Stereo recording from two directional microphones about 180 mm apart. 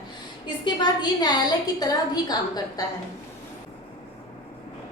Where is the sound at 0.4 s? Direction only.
25° left (ahead or behind).